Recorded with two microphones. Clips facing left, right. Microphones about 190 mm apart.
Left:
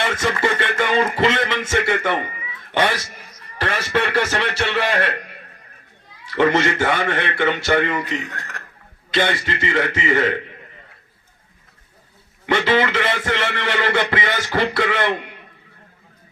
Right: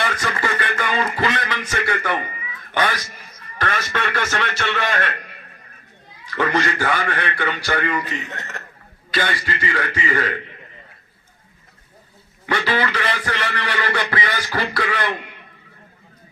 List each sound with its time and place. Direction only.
0.0 s a man's voice: 25° left (ahead or behind)
6.2 s a man's voice: 25° left (ahead or behind)
8.2 s a man's voice: 20° right (ahead or behind)
9.1 s a man's voice: 20° left (ahead or behind)
12.5 s a man's voice: 20° left (ahead or behind)